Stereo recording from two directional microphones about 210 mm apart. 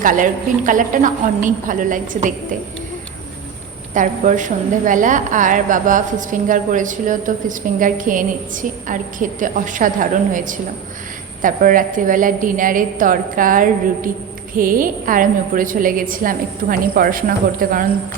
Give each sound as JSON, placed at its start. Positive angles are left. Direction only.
{"t": 0.0, "sound": "a woman's voice", "side_deg": -40}
{"t": 3.9, "sound": "a woman's voice", "side_deg": -35}